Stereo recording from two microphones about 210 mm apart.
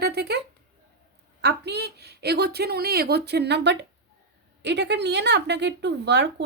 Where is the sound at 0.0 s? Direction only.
50° right (ahead or behind).